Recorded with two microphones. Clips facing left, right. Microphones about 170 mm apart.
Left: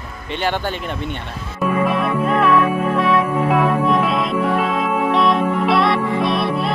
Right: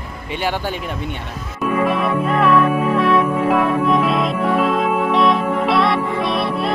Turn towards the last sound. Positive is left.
turn(degrees=0)  # may be behind; listen again after turning